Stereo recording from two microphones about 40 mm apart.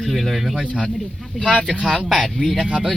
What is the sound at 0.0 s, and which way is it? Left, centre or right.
Speech, centre.